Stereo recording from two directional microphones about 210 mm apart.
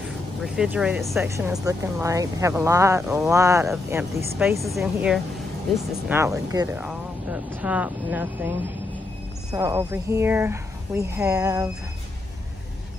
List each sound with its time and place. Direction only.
0.4 s speech: 5° right (ahead or behind)
3.0 s speech: 5° right (ahead or behind)
3.3 s speech: 15° right (ahead or behind)